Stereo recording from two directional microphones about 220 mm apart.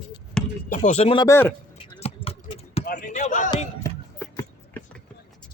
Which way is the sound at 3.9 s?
10° left (ahead or behind).